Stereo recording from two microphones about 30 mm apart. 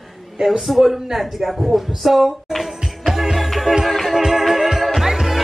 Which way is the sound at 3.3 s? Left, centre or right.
Centre.